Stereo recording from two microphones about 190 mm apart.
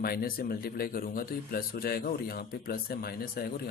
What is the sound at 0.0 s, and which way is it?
Speech, 55° left (ahead or behind).